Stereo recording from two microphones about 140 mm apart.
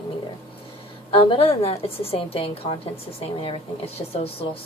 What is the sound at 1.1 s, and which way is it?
A woman's voice, 40° left (ahead or behind).